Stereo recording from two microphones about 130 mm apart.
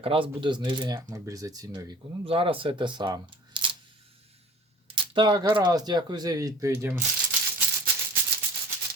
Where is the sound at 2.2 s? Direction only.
45° right (ahead or behind).